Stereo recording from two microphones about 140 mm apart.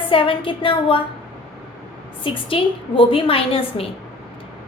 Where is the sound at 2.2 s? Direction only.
40° left (ahead or behind).